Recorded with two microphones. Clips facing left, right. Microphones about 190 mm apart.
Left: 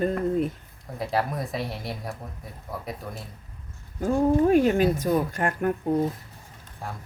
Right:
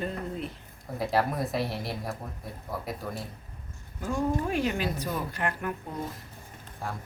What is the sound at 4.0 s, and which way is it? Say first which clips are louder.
Speech: left 8 dB; 45° left (ahead or behind).